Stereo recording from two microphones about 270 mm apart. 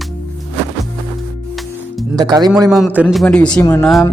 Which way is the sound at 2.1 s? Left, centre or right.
Centre.